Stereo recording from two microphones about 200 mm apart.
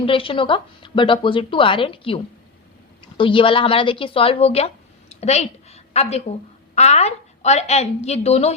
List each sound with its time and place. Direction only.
0.0 s a woman's voice: 25° left (ahead or behind)